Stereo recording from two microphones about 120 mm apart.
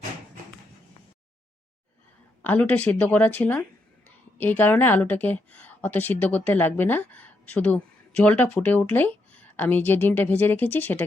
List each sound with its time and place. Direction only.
2.4 s a woman's voice: 15° left (ahead or behind)